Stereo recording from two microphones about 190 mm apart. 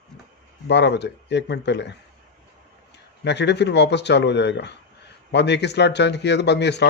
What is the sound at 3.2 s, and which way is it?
Speech, 65° left (ahead or behind).